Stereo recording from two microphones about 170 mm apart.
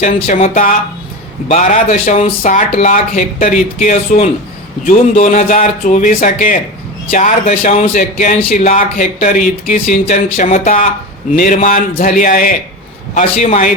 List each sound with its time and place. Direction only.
0.5 s speech: 50° left (ahead or behind)